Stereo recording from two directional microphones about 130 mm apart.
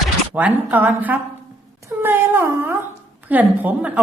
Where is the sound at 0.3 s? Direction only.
10° right (ahead or behind).